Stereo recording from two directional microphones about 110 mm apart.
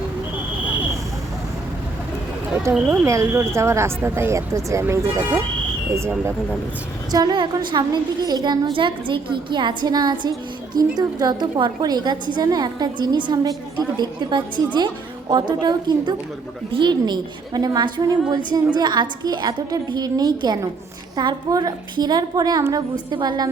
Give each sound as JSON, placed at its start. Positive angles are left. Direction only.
{"t": 2.7, "sound": "speech", "side_deg": -15}
{"t": 3.1, "sound": "a woman's voice", "side_deg": -25}
{"t": 7.1, "sound": "a woman's voice", "side_deg": -40}
{"t": 8.7, "sound": "a woman's voice", "side_deg": -50}